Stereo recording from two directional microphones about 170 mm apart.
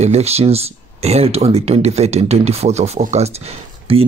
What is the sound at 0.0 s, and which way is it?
Speech, 40° right (ahead or behind).